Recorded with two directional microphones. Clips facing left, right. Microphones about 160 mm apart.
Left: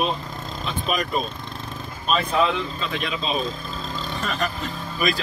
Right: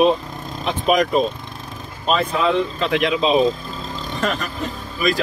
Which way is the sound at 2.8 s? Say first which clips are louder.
Right 9 dB; 75° right (ahead or behind).